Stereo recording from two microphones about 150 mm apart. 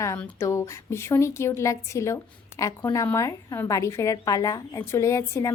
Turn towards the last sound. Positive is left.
turn(degrees=20)  # may be behind; listen again after turning